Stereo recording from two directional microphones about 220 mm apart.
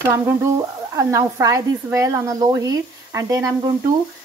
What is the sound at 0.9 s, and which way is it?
Speech, 15° right (ahead or behind).